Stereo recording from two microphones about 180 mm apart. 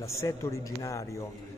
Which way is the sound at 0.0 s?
15° left (ahead or behind).